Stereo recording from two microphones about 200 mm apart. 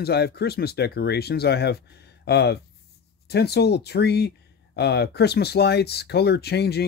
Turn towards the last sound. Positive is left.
turn(degrees=55)  # may be behind; listen again after turning